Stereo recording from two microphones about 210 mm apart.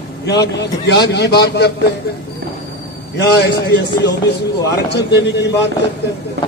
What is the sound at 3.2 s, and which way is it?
A man's voice, 50° left (ahead or behind).